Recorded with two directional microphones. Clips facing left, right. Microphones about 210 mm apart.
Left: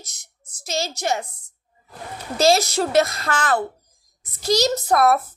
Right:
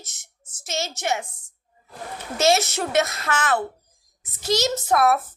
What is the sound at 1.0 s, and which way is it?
Speech, 35° left (ahead or behind).